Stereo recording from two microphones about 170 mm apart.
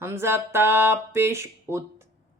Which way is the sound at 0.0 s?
15° right (ahead or behind).